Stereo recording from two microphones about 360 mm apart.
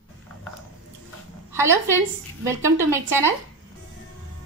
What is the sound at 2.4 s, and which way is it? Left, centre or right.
Speech, centre.